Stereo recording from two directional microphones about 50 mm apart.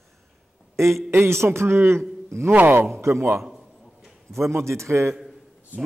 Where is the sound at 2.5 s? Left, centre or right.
Right.